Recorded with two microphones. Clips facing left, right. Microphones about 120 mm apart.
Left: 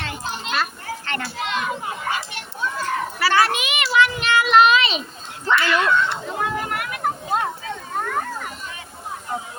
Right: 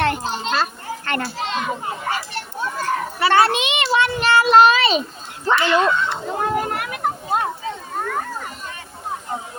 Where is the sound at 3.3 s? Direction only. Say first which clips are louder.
Right 4 dB; 30° right (ahead or behind).